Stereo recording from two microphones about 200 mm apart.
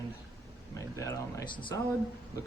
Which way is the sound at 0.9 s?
15° left (ahead or behind).